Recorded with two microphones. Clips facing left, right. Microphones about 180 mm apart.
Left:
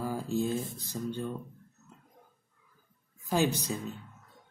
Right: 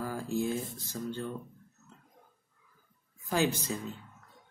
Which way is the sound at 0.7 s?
15° left (ahead or behind).